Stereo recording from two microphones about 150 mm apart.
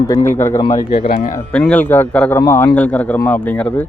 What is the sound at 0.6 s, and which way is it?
Speech, 30° left (ahead or behind).